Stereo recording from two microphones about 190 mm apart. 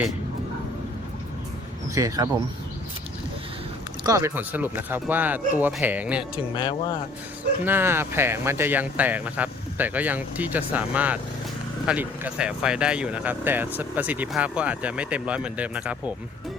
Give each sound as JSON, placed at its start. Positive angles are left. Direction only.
{"t": 2.0, "sound": "speech", "side_deg": -20}
{"t": 4.0, "sound": "speech", "side_deg": -15}
{"t": 6.3, "sound": "speech", "side_deg": 25}
{"t": 7.6, "sound": "speech", "side_deg": -10}